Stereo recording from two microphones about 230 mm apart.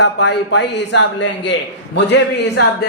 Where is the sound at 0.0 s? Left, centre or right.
Left.